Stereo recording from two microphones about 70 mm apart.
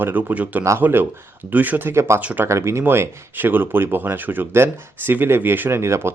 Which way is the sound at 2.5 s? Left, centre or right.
Right.